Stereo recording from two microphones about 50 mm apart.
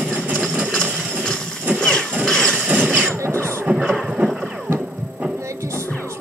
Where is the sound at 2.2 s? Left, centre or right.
Centre.